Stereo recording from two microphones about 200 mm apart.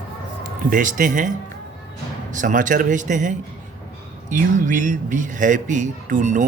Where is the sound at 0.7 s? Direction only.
40° right (ahead or behind).